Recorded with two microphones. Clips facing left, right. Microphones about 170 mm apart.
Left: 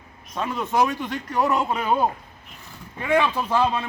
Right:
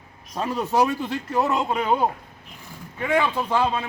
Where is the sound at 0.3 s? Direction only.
35° right (ahead or behind).